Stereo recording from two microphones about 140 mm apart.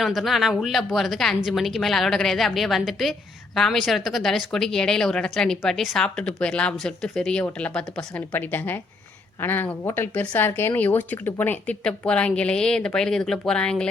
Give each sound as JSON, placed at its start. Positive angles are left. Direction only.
{"t": 0.0, "sound": "speech", "side_deg": 0}